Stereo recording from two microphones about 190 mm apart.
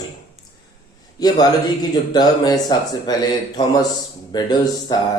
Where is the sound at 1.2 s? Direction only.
20° left (ahead or behind).